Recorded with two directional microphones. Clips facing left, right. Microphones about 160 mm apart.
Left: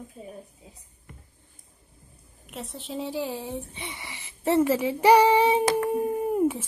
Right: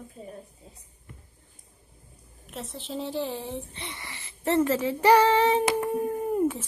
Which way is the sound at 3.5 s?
15° left (ahead or behind).